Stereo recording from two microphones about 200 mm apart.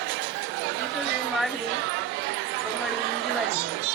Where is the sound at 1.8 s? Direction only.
65° right (ahead or behind).